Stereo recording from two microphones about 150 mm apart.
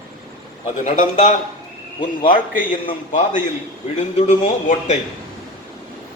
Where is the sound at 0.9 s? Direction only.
55° left (ahead or behind).